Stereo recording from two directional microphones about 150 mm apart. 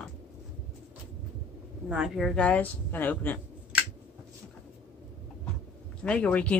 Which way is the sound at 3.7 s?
10° right (ahead or behind).